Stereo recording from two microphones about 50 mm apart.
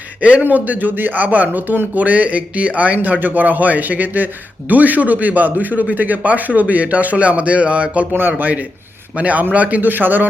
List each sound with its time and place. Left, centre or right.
0.2 s a man's voice: right
2.0 s a man's voice: right